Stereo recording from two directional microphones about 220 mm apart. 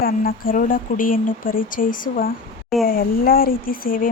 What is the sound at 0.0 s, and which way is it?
Speech, 40° left (ahead or behind).